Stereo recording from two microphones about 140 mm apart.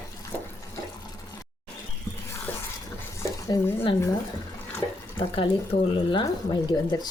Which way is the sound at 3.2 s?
20° left (ahead or behind).